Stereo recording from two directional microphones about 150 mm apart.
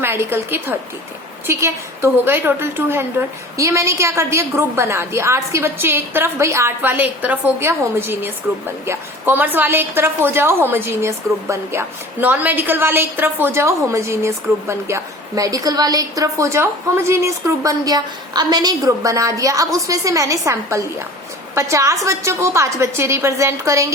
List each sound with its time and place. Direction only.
0.0 s a woman's voice: 15° right (ahead or behind)